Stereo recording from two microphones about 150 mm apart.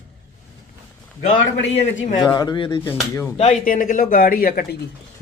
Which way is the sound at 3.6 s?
65° left (ahead or behind).